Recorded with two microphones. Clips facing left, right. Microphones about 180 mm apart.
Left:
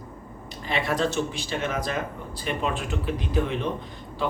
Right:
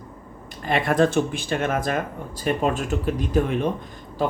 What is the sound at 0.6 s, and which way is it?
Speech, 50° right (ahead or behind).